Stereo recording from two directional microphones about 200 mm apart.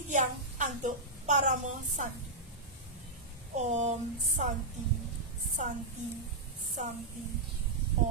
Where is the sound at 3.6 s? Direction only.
35° right (ahead or behind).